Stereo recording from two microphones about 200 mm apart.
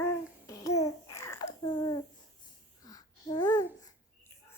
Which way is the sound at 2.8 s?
20° left (ahead or behind).